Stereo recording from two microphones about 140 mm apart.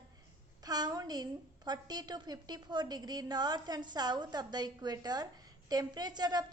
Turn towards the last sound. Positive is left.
turn(degrees=-30)  # may be behind; listen again after turning